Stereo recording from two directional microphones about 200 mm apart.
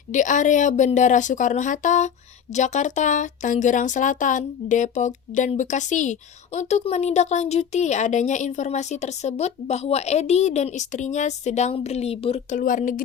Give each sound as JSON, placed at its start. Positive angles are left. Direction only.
{"t": 0.1, "sound": "a woman's voice", "side_deg": 40}